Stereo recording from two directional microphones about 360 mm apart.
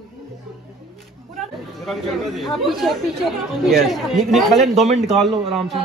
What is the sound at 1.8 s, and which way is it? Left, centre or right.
Speech, centre.